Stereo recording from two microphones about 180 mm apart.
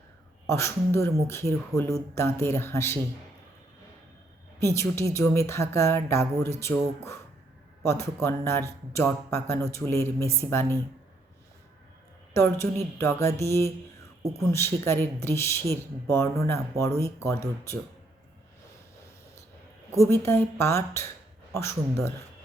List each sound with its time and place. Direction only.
0.4 s speech: 15° left (ahead or behind)
4.6 s speech: 15° left (ahead or behind)
12.3 s speech: 15° left (ahead or behind)
20.0 s speech: 15° left (ahead or behind)